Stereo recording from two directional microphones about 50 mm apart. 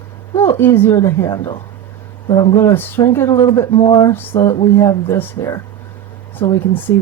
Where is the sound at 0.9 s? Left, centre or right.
Left.